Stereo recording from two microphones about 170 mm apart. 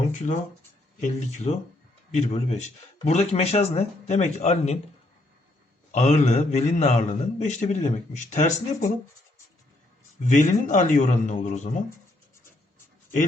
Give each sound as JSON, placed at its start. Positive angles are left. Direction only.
{"t": 1.0, "sound": "a man's voice", "side_deg": 40}
{"t": 5.9, "sound": "a man's voice", "side_deg": 40}
{"t": 10.2, "sound": "a man's voice", "side_deg": 50}